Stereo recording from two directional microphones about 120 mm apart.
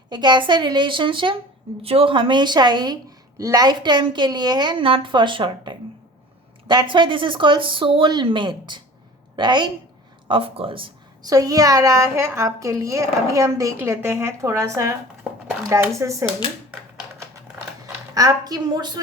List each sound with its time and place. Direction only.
0.1 s a woman's voice: 40° right (ahead or behind)
11.2 s a woman's voice: 30° right (ahead or behind)
15.2 s a sound: 15° right (ahead or behind)
18.1 s a woman's voice: 30° right (ahead or behind)